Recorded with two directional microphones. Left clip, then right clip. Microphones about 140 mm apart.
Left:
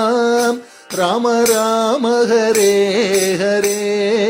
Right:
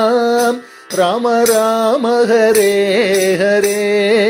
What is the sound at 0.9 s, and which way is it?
Music, 5° right (ahead or behind).